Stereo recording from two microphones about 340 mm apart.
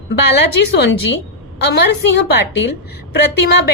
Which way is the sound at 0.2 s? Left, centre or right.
Left.